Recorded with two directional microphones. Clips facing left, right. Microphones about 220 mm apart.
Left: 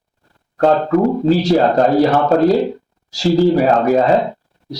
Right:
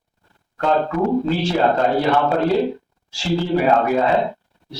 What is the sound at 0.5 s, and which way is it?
Speech, 40° left (ahead or behind).